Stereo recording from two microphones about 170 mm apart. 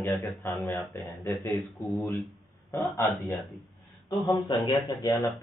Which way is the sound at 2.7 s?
15° left (ahead or behind).